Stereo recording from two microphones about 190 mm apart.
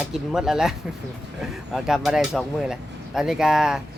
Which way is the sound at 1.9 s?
Centre (ahead or behind).